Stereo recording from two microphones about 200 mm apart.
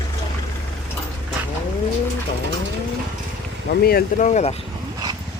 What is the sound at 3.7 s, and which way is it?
Speech, 50° left (ahead or behind).